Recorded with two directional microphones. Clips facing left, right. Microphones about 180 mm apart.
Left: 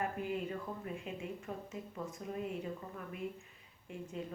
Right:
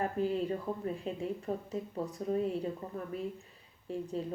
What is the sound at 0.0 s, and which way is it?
Speech, 35° right (ahead or behind).